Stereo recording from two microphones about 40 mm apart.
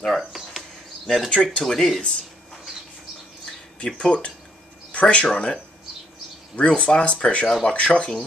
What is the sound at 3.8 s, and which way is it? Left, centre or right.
Speech, left.